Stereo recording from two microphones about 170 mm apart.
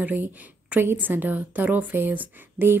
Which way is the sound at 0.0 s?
10° right (ahead or behind).